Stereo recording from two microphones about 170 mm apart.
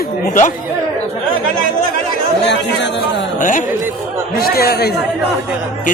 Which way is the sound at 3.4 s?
50° left (ahead or behind).